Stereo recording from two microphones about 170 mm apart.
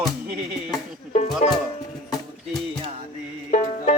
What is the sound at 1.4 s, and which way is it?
Music, 45° left (ahead or behind).